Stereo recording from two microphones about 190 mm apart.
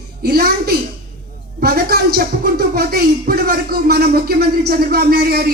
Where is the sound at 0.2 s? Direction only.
55° right (ahead or behind).